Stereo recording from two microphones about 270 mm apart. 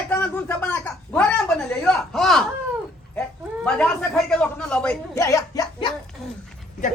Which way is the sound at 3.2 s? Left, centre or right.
Centre.